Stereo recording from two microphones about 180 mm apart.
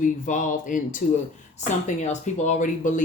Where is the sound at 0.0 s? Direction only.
45° left (ahead or behind).